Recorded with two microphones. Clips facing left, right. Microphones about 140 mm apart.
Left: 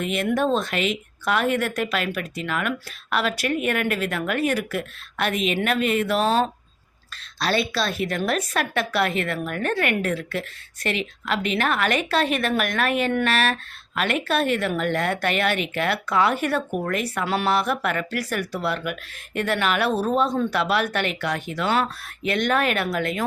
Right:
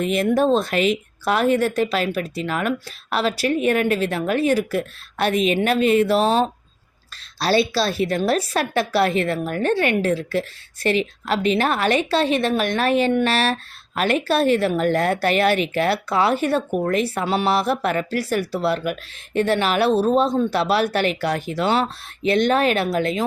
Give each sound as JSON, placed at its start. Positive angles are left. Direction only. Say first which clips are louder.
{"t": 0.0, "sound": "speech", "louder": "right 4 dB", "side_deg": -35}